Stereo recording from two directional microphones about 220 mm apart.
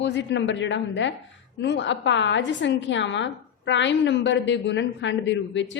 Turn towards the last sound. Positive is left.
turn(degrees=55)  # may be behind; listen again after turning